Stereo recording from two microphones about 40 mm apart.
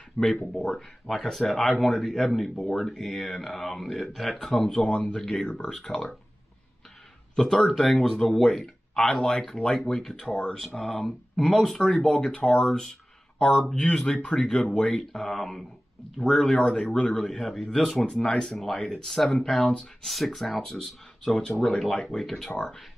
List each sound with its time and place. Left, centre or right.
0.2 s speech: left
1.0 s speech: centre
2.5 s speech: centre
4.6 s speech: left
7.3 s speech: centre
10.8 s speech: centre; by 14.4 s left
14.4 s speech: centre
17.4 s speech: centre